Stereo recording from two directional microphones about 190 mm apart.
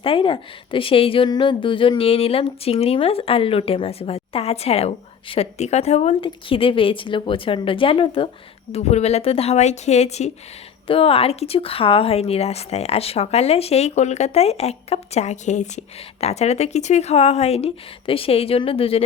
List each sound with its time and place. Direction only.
0.0 s a woman's voice: 30° left (ahead or behind)